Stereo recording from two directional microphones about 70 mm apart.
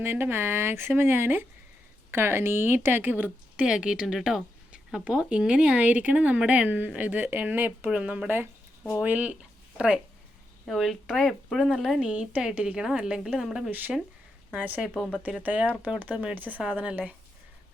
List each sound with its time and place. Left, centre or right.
0.0 s speech: right
3.7 s speech: centre; by 7.9 s right
7.9 s speech: centre
9.4 s a sound: centre
10.7 s speech: centre
12.0 s speech: centre
13.7 s speech: right
14.8 s speech: centre
15.3 s speech: centre